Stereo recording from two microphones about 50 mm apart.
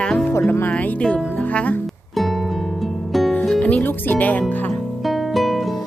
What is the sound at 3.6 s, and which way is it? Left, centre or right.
Speech, left.